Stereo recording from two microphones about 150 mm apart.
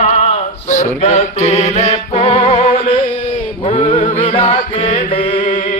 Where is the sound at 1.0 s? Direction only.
45° left (ahead or behind).